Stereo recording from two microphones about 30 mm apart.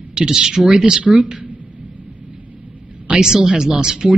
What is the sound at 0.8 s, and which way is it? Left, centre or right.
Speech, right.